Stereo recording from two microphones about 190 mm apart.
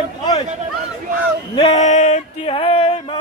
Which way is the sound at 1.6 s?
35° left (ahead or behind).